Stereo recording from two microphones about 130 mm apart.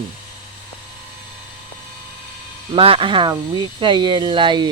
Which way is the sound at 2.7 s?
45° right (ahead or behind).